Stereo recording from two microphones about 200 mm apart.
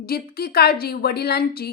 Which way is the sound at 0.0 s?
50° left (ahead or behind).